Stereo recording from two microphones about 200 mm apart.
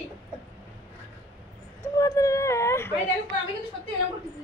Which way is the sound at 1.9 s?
15° left (ahead or behind).